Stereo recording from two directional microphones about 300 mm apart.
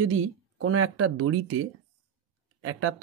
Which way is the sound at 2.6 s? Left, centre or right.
Right.